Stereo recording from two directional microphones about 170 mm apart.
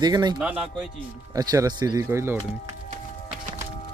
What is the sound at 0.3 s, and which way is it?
Speech, 5° right (ahead or behind).